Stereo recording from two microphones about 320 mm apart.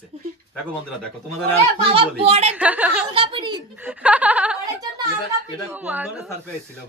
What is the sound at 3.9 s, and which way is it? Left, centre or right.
Speech, centre.